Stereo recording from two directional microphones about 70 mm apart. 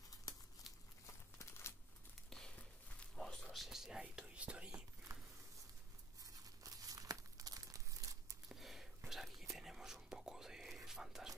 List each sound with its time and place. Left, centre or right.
1.0 s crumpling: left
2.2 s walk: centre
3.2 s a sound: centre
3.5 s whispering: centre
4.4 s speech: centre
5.1 s a sound: right
6.2 s crumpling: right
8.5 s whispering: centre